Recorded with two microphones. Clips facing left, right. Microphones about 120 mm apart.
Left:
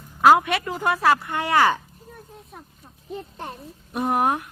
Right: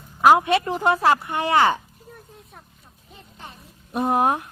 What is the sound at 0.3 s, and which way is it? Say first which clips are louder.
A woman's voice: right 3 dB; 25° right (ahead or behind).